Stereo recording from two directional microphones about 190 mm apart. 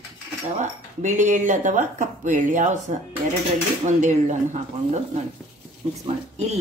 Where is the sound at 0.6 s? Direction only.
40° right (ahead or behind).